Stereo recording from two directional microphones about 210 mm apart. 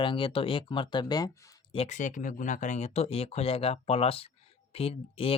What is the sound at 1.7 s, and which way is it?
Speech, 30° left (ahead or behind).